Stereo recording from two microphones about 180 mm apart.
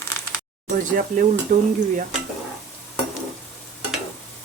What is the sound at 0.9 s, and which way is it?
Stir, 50° right (ahead or behind).